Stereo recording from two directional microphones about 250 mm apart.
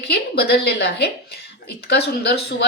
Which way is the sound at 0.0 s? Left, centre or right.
Left.